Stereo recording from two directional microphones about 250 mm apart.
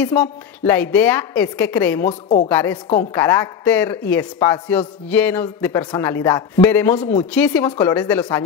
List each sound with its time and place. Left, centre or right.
0.0 s a man's voice: centre